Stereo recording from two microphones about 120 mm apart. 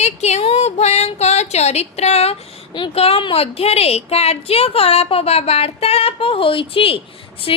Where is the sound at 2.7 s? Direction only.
50° left (ahead or behind).